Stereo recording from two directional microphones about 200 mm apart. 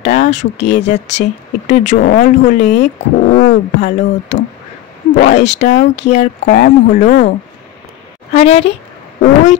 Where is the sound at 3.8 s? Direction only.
60° left (ahead or behind).